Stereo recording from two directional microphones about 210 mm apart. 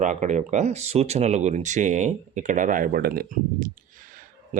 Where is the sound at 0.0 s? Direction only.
35° right (ahead or behind).